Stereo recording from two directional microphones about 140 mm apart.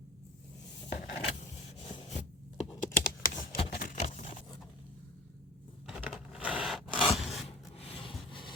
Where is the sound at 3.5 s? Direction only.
90° left.